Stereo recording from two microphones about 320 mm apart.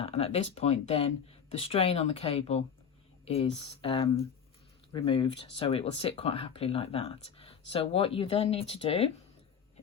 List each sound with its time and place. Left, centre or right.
0.0 s speech: centre